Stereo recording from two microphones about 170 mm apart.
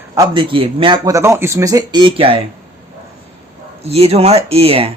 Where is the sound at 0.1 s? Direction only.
25° right (ahead or behind).